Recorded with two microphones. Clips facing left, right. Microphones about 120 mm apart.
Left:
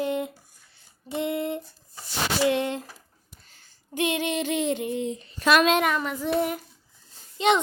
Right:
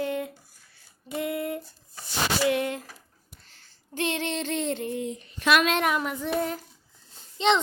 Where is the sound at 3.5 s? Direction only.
15° left (ahead or behind); by 5.6 s 35° left (ahead or behind).